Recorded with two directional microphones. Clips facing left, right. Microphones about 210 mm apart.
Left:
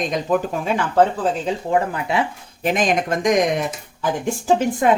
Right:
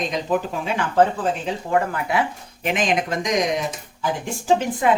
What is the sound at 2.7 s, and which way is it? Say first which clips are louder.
Speech: left 2 dB; 45° left (ahead or behind).